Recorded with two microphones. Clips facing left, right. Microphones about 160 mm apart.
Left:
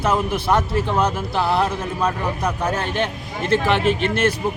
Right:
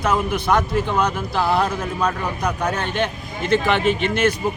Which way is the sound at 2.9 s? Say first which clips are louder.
Even; 30° left (ahead or behind).